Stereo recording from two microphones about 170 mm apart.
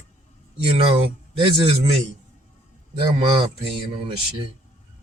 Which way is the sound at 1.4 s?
30° right (ahead or behind).